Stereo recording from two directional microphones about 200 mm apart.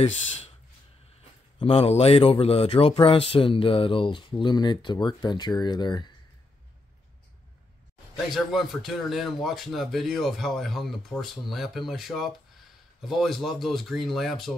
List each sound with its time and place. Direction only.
1.6 s speech: 30° left (ahead or behind)
8.3 s speech: centre (ahead or behind)